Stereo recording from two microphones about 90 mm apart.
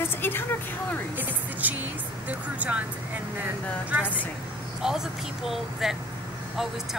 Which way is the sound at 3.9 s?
20° right (ahead or behind).